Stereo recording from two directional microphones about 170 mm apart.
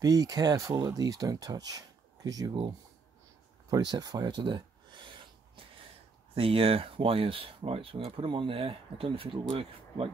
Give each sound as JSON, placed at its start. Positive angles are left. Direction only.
{"t": 0.0, "sound": "speech", "side_deg": -20}
{"t": 3.7, "sound": "speech", "side_deg": -25}
{"t": 6.3, "sound": "speech", "side_deg": -35}